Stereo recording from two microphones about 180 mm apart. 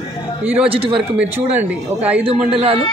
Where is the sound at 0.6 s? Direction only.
30° right (ahead or behind).